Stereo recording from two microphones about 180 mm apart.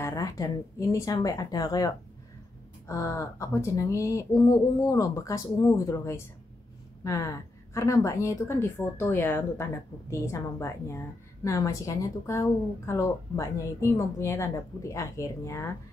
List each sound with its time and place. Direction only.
0.0 s a woman's voice: 20° left (ahead or behind)